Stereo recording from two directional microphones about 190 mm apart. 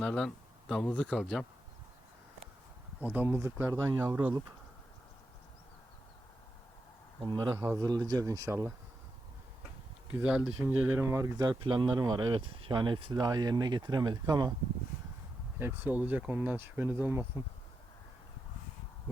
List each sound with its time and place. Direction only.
0.0 s speech: 5° left (ahead or behind)
3.0 s speech: 10° right (ahead or behind)
7.3 s speech: 20° right (ahead or behind)
10.2 s speech: 5° right (ahead or behind); by 14.5 s 20° right (ahead or behind)
15.5 s speech: 10° right (ahead or behind)